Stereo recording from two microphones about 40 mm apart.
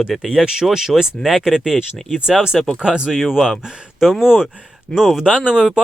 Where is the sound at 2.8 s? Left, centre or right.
Right.